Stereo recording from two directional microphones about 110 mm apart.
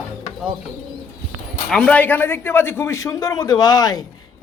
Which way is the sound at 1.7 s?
10° left (ahead or behind).